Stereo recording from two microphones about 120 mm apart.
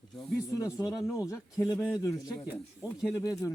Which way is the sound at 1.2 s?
25° left (ahead or behind).